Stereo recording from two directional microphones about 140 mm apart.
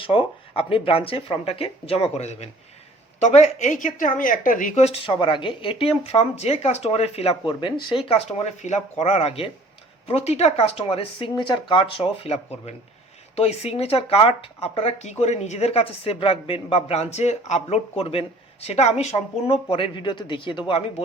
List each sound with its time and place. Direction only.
0.0 s speech: 40° left (ahead or behind); by 4.7 s 70° left (ahead or behind)
4.7 s speech: 50° left (ahead or behind)
5.0 s speech: 35° left (ahead or behind)